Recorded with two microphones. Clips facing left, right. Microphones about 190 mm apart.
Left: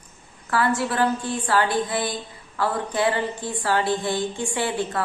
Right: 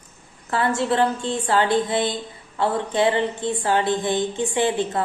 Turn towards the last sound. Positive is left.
turn(degrees=-20)  # may be behind; listen again after turning